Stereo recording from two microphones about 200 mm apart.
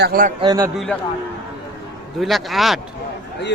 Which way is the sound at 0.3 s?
20° right (ahead or behind).